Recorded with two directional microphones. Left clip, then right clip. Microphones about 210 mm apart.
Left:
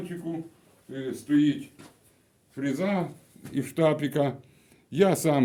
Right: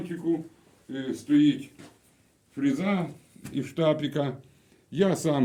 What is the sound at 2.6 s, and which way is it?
Speech, 25° left (ahead or behind).